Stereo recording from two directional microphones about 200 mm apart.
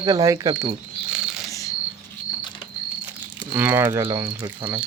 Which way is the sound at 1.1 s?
5° right (ahead or behind).